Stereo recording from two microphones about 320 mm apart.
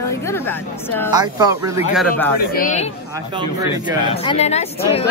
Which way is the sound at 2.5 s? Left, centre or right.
Left.